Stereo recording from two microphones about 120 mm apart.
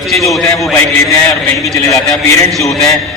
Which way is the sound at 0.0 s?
Centre (ahead or behind).